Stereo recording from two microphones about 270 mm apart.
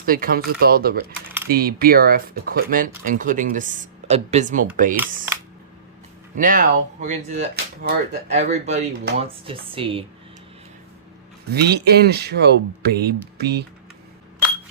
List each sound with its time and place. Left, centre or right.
0.0 s speech: right
6.3 s speech: right
11.5 s speech: right